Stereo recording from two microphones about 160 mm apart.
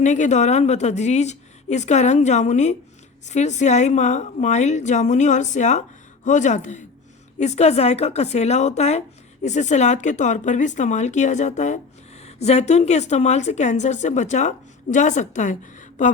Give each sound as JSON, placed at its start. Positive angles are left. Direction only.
{"t": 0.0, "sound": "a woman's voice", "side_deg": 50}